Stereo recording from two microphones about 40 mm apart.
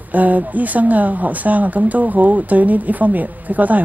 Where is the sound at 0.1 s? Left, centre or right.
Right.